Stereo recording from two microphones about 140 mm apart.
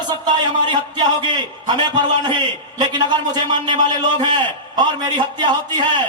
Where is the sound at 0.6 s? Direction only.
30° right (ahead or behind).